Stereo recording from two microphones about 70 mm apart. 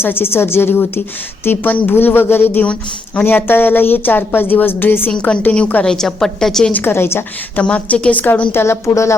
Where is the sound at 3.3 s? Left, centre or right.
Left.